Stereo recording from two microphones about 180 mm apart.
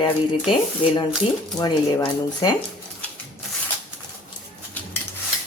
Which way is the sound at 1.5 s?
20° left (ahead or behind).